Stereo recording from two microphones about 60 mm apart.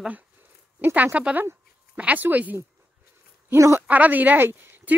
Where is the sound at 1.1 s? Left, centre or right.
Right.